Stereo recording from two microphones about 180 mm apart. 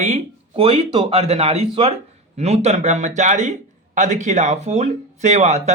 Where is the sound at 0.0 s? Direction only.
35° right (ahead or behind).